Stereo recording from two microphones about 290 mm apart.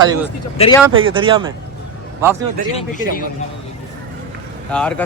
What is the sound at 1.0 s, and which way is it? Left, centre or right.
Speech, centre.